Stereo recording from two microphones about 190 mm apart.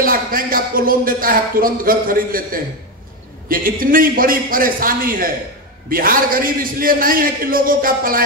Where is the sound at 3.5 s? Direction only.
50° right (ahead or behind).